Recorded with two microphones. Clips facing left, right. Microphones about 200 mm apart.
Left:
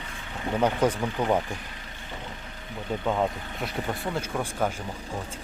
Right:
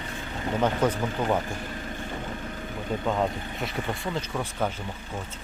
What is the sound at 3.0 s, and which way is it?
Speech, centre (ahead or behind).